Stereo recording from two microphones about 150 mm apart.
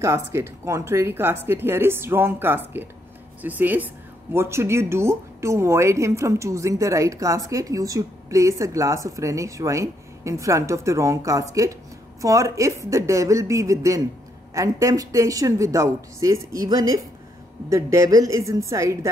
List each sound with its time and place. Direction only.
0.0 s speech: 20° right (ahead or behind)